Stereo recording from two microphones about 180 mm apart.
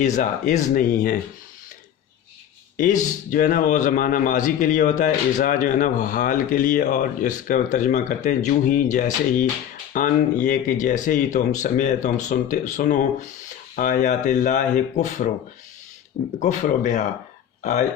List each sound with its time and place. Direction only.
0.0 s a man's voice: 45° left (ahead or behind)
2.7 s a man's voice: 45° left (ahead or behind)
16.4 s a man's voice: 45° left (ahead or behind)